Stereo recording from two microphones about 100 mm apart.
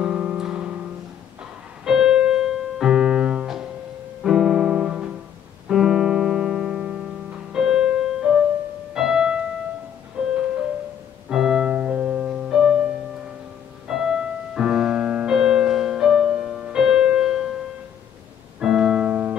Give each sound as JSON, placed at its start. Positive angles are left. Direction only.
{"t": 0.0, "sound": "music", "side_deg": -10}
{"t": 1.9, "sound": "piano", "side_deg": -10}
{"t": 4.2, "sound": "music", "side_deg": -5}
{"t": 18.6, "sound": "piano", "side_deg": -5}